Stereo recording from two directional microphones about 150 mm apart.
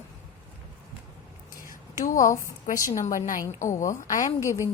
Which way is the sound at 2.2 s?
20° left (ahead or behind).